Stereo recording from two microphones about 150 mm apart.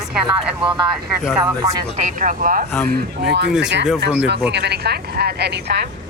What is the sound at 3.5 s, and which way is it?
Speech, 5° right (ahead or behind).